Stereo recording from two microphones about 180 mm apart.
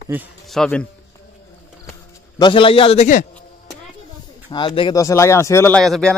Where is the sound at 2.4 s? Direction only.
30° left (ahead or behind).